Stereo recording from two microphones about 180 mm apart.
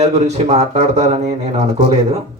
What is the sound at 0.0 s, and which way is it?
Speech, 40° right (ahead or behind).